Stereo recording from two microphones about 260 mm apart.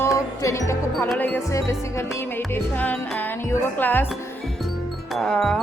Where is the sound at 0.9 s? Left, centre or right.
Centre.